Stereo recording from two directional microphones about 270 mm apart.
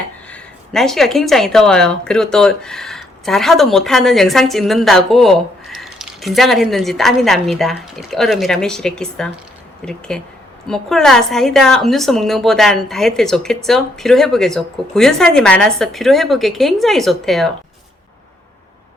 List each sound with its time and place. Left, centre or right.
0.3 s speech: centre